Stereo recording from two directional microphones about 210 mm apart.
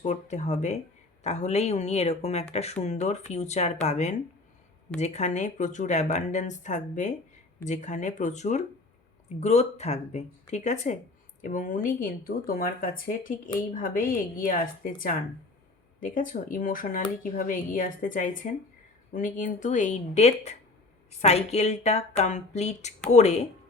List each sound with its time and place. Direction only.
0.0 s speech: 35° left (ahead or behind)